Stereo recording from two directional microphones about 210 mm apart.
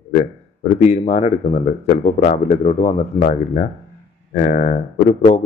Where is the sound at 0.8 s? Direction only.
30° left (ahead or behind).